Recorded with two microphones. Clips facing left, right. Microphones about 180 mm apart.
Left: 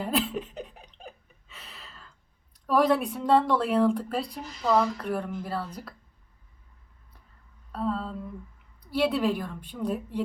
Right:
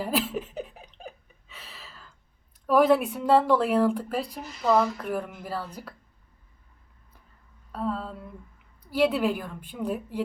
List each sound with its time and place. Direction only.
0.0 s laughter: 5° right (ahead or behind)
0.9 s hiccup: centre (ahead or behind)
2.6 s speech: 5° right (ahead or behind)
7.7 s speech: centre (ahead or behind)